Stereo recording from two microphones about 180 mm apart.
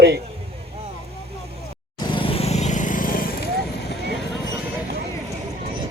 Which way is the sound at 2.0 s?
25° left (ahead or behind).